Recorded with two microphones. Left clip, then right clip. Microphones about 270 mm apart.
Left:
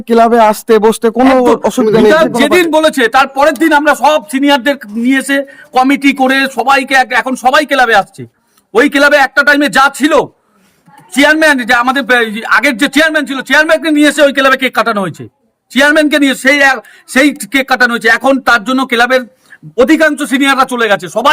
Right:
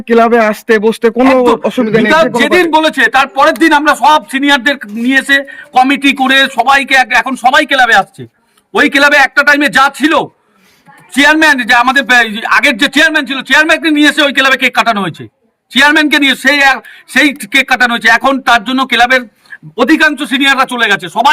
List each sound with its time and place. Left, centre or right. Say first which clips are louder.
0.0 s speech: left 1 dB; centre
1.4 s a man's voice: even; centre
2.1 s a man's voice: even; centre